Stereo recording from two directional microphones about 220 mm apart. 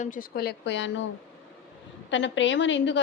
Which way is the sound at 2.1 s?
55° left (ahead or behind).